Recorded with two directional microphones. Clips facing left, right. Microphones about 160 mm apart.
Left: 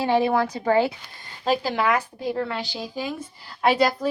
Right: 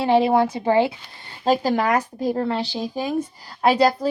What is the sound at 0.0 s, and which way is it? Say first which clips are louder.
Speech: right 3 dB; 25° right (ahead or behind).